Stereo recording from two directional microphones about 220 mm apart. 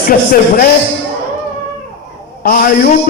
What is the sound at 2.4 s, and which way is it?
Speech, 40° left (ahead or behind).